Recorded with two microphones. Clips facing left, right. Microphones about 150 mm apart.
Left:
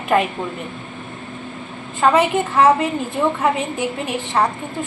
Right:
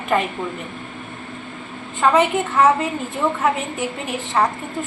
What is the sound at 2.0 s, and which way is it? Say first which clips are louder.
A woman's voice: left 1 dB; centre (ahead or behind).